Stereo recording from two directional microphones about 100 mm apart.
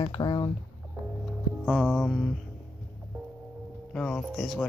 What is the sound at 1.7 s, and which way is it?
Speech, centre (ahead or behind).